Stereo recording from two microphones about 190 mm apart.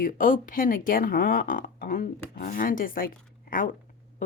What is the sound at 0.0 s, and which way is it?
Speech, 45° left (ahead or behind).